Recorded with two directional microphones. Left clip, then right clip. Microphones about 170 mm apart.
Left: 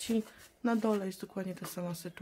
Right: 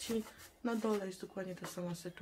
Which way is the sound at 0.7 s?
40° left (ahead or behind).